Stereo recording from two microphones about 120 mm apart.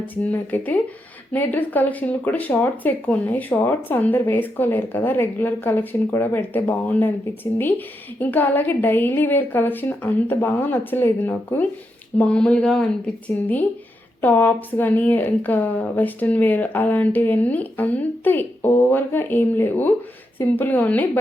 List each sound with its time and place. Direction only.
0.0 s speech: 15° left (ahead or behind)
8.2 s speech: 15° left (ahead or behind)